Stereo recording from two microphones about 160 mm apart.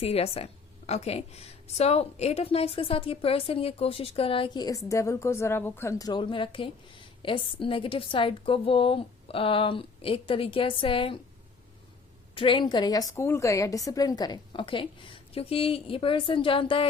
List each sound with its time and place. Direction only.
0.0 s a woman's voice: 40° left (ahead or behind)
12.3 s a woman's voice: 30° left (ahead or behind)